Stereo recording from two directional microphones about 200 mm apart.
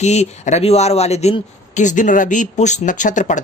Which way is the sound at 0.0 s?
35° left (ahead or behind).